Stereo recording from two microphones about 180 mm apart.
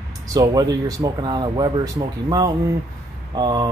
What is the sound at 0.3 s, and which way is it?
Speech, 20° right (ahead or behind).